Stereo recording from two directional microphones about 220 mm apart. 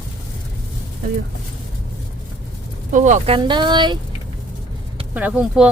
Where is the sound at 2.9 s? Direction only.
35° right (ahead or behind).